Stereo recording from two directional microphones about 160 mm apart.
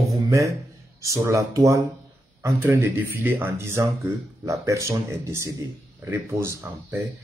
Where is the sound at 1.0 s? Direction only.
20° right (ahead or behind).